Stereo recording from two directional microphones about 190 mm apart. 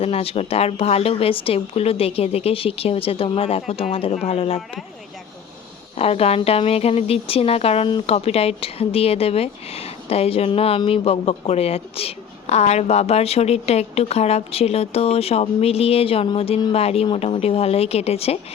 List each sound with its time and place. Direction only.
0.0 s speech: 30° left (ahead or behind)
6.0 s speech: 30° left (ahead or behind)